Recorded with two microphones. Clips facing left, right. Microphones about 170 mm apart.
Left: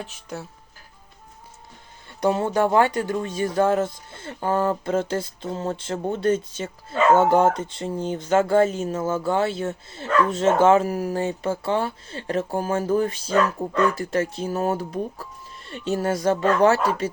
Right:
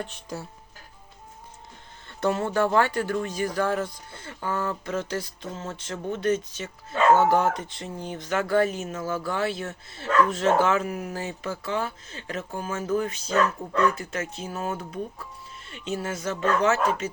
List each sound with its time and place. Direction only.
0.0 s speech: centre (ahead or behind)
2.0 s speech: 15° left (ahead or behind); by 16.4 s 35° left (ahead or behind)